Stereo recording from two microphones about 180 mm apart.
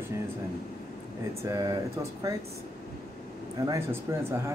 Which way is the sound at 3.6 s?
15° right (ahead or behind).